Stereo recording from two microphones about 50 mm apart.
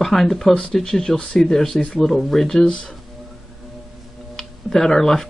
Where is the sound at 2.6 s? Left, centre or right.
Centre.